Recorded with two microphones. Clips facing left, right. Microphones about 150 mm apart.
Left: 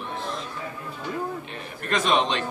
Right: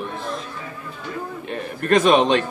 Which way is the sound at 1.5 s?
50° right (ahead or behind).